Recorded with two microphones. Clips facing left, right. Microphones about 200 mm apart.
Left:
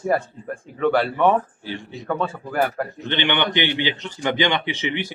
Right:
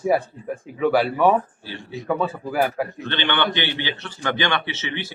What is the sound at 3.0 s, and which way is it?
A man's voice, 15° left (ahead or behind).